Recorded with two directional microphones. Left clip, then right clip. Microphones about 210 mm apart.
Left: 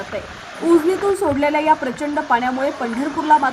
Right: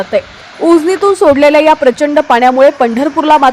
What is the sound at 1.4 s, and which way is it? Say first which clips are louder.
A woman's voice: right 9 dB; 40° right (ahead or behind).